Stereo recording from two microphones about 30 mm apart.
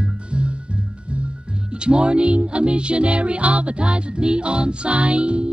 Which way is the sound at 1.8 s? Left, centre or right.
Right.